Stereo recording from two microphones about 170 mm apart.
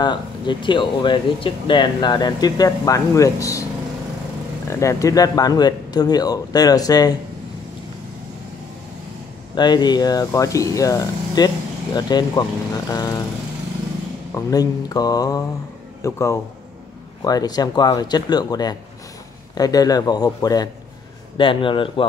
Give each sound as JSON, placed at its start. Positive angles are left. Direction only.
{"t": 0.0, "sound": "speech", "side_deg": 25}
{"t": 4.6, "sound": "speech", "side_deg": 20}
{"t": 9.6, "sound": "speech", "side_deg": 25}
{"t": 14.3, "sound": "speech", "side_deg": 20}